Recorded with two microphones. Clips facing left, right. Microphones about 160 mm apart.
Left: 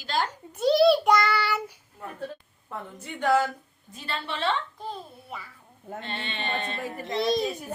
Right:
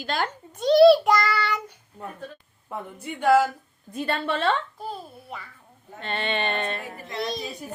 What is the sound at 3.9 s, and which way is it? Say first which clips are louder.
Speech: right 8 dB; 55° right (ahead or behind).